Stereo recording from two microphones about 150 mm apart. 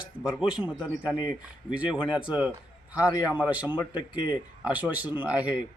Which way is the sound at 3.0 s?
25° left (ahead or behind).